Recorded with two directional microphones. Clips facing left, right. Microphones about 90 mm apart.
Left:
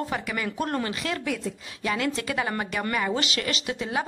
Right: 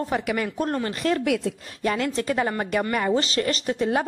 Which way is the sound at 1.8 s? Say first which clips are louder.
Right 3 dB; 40° right (ahead or behind).